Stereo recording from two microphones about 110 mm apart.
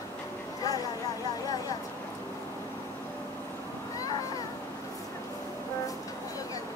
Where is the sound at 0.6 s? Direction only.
30° left (ahead or behind).